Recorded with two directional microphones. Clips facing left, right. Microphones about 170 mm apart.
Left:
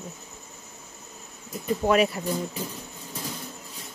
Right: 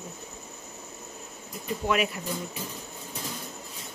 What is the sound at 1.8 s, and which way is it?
Speech, 35° left (ahead or behind).